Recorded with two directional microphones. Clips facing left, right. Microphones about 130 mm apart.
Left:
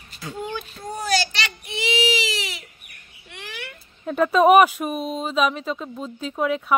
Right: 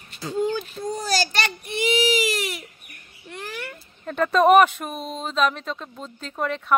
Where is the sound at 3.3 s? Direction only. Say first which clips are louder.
Right 4 dB; 40° right (ahead or behind).